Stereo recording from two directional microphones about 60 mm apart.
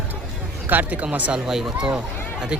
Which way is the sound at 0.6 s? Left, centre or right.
Right.